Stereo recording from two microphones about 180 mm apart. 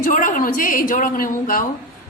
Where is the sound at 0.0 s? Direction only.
50° left (ahead or behind).